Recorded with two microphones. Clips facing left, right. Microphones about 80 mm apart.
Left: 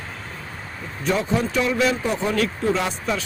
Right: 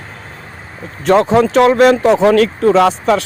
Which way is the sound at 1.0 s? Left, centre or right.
Right.